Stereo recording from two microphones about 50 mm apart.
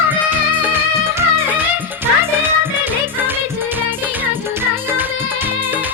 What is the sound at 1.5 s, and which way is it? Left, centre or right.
Music, right.